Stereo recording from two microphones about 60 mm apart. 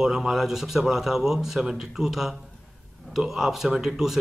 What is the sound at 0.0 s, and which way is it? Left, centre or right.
Speech, centre.